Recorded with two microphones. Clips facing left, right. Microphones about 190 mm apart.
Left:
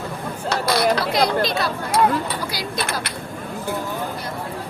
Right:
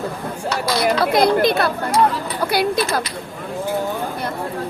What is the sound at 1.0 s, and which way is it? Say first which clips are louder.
Speech: right 5 dB; 55° right (ahead or behind).